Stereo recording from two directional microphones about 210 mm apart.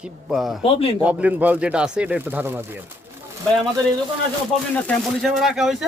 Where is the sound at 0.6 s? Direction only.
25° left (ahead or behind).